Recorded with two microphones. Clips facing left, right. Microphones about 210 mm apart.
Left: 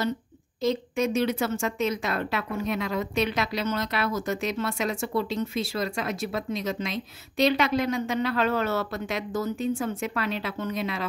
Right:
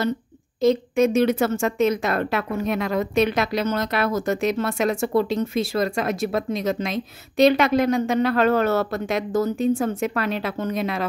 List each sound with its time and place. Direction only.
0.6 s a woman's voice: 50° right (ahead or behind)